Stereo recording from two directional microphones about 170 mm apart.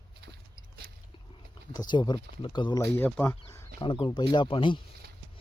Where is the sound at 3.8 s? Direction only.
30° left (ahead or behind).